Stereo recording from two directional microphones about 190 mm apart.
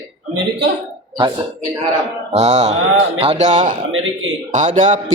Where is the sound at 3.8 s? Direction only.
90° right.